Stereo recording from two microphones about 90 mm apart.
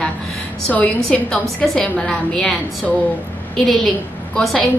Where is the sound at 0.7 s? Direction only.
15° left (ahead or behind).